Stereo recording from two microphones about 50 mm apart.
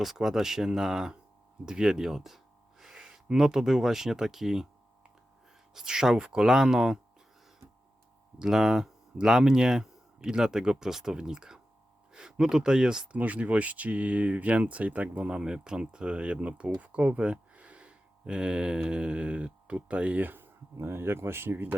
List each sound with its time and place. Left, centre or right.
0.0 s speech: centre
5.7 s speech: centre
8.4 s speech: centre
13.1 s speech: right
15.3 s speech: centre; by 20.5 s right
20.7 s speech: right